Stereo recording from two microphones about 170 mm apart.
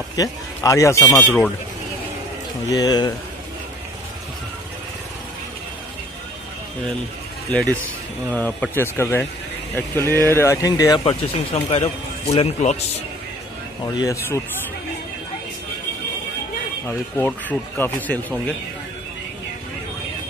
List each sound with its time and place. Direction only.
0.1 s speech: 20° left (ahead or behind)
2.7 s speech: 20° left (ahead or behind)
8.3 s speech: 10° left (ahead or behind)
11.1 s speech: 35° left (ahead or behind)
13.9 s speech: 20° left (ahead or behind)
16.8 s speech: 10° left (ahead or behind)